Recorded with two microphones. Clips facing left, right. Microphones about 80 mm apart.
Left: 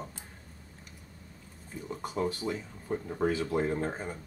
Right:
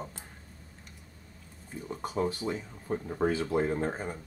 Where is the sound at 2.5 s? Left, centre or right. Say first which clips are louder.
Right 1 dB; centre.